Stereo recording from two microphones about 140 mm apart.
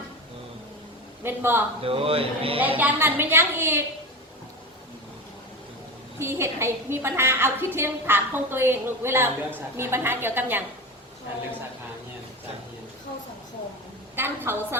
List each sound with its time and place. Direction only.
1.2 s a woman's voice: 15° right (ahead or behind)
1.8 s speech: 40° right (ahead or behind)
2.6 s a woman's voice: 10° right (ahead or behind)
6.1 s a woman's voice: 20° right (ahead or behind)
14.2 s a woman's voice: 15° right (ahead or behind)